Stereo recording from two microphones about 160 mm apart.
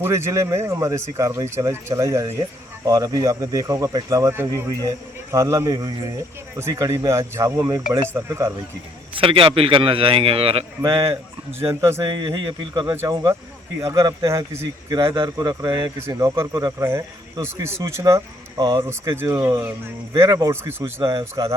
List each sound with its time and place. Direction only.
0.0 s speech: 15° right (ahead or behind)
9.1 s a man's voice: 35° right (ahead or behind)
10.8 s speech: 20° right (ahead or behind)
12.0 s speech: 30° right (ahead or behind)
12.9 s speech: 15° right (ahead or behind)
14.9 s a man's voice: 30° right (ahead or behind)